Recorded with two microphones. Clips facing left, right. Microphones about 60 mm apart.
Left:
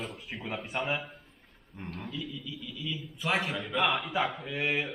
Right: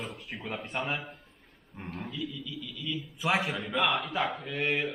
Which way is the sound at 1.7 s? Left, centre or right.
Centre.